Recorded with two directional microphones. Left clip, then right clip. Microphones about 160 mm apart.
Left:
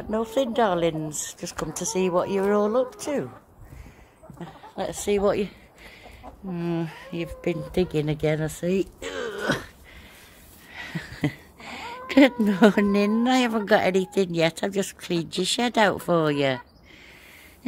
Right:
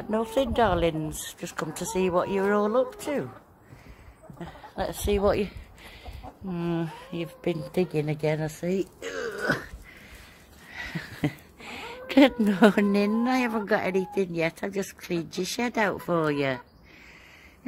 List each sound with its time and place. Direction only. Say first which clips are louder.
0.1 s speech: left 1 dB; centre (ahead or behind)
4.4 s a woman's voice: left 1 dB; centre (ahead or behind)
7.7 s speech: left 3 dB; 20° left (ahead or behind)
10.7 s a sound: even; 10° left (ahead or behind)
13.2 s speech: left 4 dB; 20° left (ahead or behind)